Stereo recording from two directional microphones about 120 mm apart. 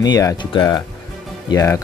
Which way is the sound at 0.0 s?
30° left (ahead or behind).